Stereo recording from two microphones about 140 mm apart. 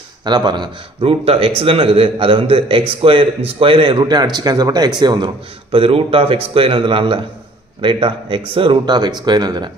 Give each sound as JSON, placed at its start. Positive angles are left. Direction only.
{"t": 0.2, "sound": "speech", "side_deg": -30}
{"t": 1.2, "sound": "speech", "side_deg": -45}